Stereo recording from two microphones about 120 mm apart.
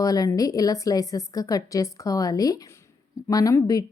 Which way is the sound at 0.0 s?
30° left (ahead or behind).